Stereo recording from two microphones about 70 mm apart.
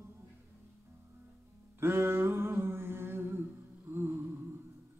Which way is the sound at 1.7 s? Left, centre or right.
Right.